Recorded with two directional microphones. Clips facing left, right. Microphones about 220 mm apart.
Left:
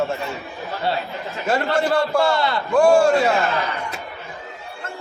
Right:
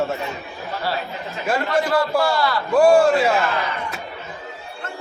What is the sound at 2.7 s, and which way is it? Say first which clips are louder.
Speech: even; 5° right (ahead or behind).